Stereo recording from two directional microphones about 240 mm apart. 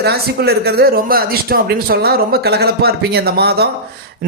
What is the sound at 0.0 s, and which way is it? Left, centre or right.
Speech, right.